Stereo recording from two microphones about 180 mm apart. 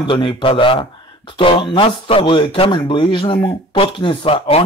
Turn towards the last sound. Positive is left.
turn(degrees=30)  # may be behind; listen again after turning